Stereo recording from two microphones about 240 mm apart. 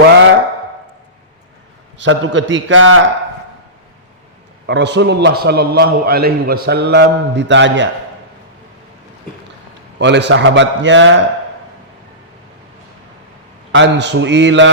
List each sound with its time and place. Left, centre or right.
2.0 s a man's voice: right
4.6 s a man's voice: right
10.0 s a man's voice: right
13.7 s a man's voice: right